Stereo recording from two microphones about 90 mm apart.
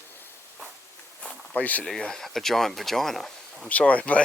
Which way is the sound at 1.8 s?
5° left (ahead or behind).